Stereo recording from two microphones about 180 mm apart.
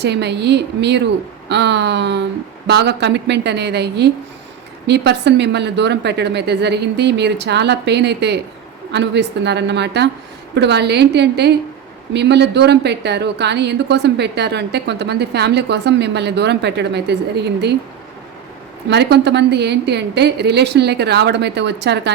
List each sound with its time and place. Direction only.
0.0 s a woman's voice: 70° right (ahead or behind)
18.9 s a woman's voice: 70° right (ahead or behind)